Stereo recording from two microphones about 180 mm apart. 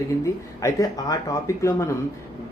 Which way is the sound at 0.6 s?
20° left (ahead or behind).